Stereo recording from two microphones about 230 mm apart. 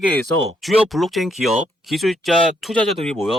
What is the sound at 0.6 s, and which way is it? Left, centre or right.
Speech, centre.